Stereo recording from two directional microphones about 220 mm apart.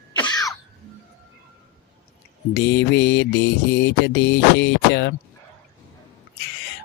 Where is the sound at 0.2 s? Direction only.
20° left (ahead or behind).